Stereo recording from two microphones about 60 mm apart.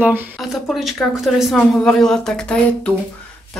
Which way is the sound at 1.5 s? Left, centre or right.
Centre.